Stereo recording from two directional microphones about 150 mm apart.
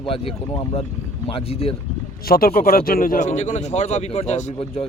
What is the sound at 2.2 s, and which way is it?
A man's voice, 75° left (ahead or behind).